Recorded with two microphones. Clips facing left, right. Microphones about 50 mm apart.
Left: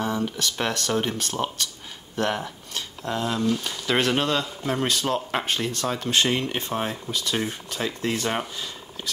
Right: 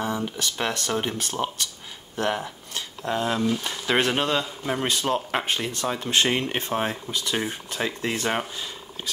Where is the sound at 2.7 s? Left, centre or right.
Right.